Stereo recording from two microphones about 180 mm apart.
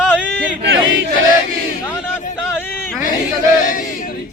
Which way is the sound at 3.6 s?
50° left (ahead or behind).